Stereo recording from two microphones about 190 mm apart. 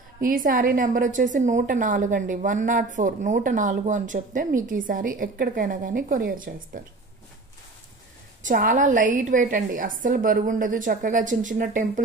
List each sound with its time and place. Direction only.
0.2 s a woman's voice: 45° right (ahead or behind)
8.4 s a woman's voice: 45° right (ahead or behind)